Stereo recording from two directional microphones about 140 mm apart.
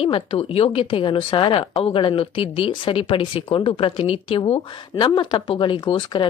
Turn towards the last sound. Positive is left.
turn(degrees=35)  # may be behind; listen again after turning